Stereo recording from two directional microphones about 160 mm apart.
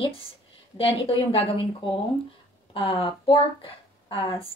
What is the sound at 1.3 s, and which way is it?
Speech, 35° left (ahead or behind).